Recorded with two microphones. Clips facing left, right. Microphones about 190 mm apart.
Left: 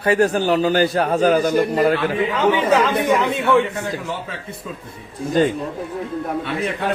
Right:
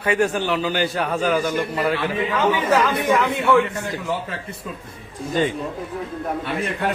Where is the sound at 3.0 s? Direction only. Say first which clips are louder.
Left 1 dB; 15° left (ahead or behind).